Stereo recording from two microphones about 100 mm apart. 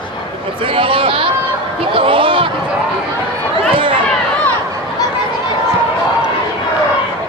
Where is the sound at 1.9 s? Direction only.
60° right (ahead or behind).